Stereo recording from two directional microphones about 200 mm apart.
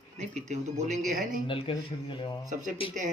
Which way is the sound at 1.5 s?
25° left (ahead or behind).